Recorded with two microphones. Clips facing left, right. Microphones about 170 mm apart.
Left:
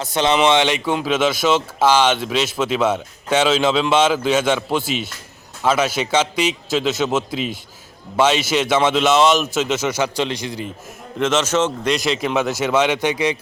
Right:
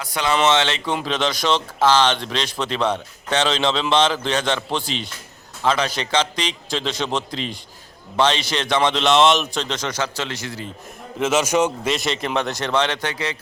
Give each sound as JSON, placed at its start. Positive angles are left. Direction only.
{"t": 0.0, "sound": "speech", "side_deg": 25}
{"t": 0.3, "sound": "speech", "side_deg": 15}
{"t": 11.2, "sound": "a man's voice", "side_deg": -10}
{"t": 11.9, "sound": "speech", "side_deg": 0}